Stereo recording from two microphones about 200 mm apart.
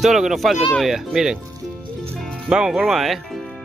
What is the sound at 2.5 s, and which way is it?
Speech, 5° right (ahead or behind).